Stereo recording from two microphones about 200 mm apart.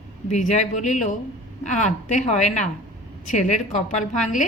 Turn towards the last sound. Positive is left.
turn(degrees=40)  # may be behind; listen again after turning